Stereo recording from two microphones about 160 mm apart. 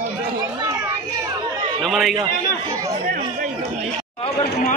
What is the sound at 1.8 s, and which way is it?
Speech, centre (ahead or behind).